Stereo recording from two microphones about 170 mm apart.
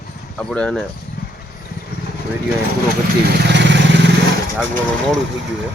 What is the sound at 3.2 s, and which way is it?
Vehicle, 75° right (ahead or behind).